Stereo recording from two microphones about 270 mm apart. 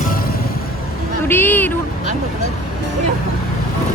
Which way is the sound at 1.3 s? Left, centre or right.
Centre.